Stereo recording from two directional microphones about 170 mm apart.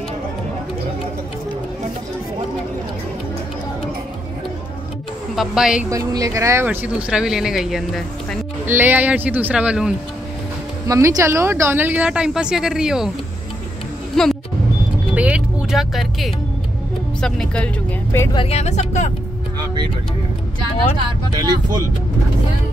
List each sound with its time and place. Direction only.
5.3 s speech: centre (ahead or behind)
5.9 s speech: 20° right (ahead or behind); by 8.4 s centre (ahead or behind)
8.6 s speech: 10° right (ahead or behind)
10.9 s speech: 15° right (ahead or behind)
14.2 s speech: centre (ahead or behind)
15.1 s vehicle: 5° right (ahead or behind)
17.2 s speech: 5° left (ahead or behind)
18.3 s speech: 35° left (ahead or behind)
21.4 s speech: 20° right (ahead or behind)